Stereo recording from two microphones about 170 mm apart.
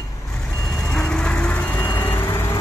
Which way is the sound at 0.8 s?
5° left (ahead or behind).